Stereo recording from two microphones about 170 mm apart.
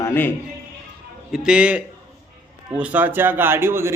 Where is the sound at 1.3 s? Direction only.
5° right (ahead or behind).